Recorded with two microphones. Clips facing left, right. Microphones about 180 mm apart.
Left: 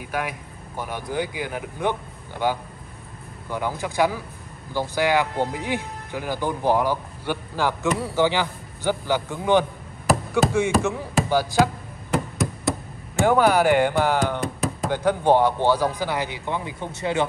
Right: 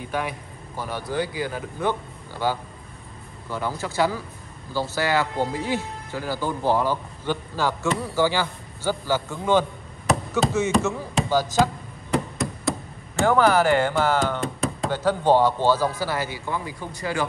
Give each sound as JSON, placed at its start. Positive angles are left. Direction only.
{"t": 0.0, "sound": "speech", "side_deg": 10}
{"t": 12.1, "sound": "a sound", "side_deg": 0}
{"t": 13.2, "sound": "speech", "side_deg": 15}
{"t": 14.4, "sound": "knock", "side_deg": 0}
{"t": 14.9, "sound": "speech", "side_deg": 15}